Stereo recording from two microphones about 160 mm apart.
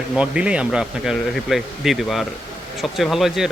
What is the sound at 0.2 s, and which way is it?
Speech, 5° right (ahead or behind).